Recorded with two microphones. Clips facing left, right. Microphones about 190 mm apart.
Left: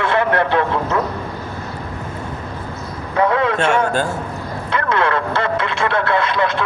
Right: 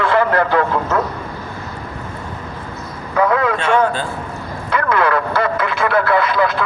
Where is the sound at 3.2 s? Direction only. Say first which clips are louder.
Even; 25° left (ahead or behind).